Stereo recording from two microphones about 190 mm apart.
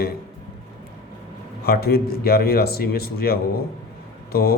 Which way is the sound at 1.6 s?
55° left (ahead or behind).